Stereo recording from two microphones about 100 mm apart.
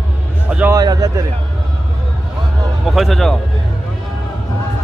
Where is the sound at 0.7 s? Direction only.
40° right (ahead or behind).